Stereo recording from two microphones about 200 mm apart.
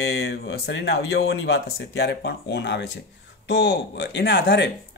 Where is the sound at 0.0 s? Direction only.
55° left (ahead or behind).